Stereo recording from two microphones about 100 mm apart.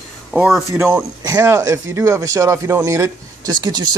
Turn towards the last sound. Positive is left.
turn(degrees=-45)  # may be behind; listen again after turning